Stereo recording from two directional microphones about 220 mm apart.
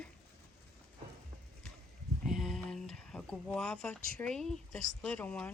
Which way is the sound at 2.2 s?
Centre (ahead or behind).